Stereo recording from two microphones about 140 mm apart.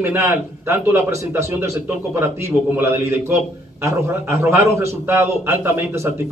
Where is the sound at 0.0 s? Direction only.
15° right (ahead or behind).